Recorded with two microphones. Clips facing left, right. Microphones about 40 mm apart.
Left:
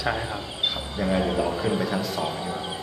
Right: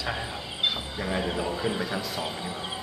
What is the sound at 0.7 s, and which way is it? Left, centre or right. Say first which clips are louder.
A man's voice: left 4 dB; centre.